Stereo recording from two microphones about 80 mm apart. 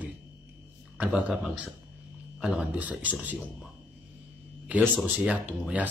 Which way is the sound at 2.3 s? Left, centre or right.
Centre.